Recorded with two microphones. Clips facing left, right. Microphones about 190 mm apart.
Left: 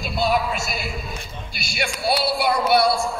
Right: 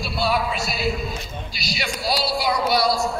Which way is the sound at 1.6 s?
55° left (ahead or behind).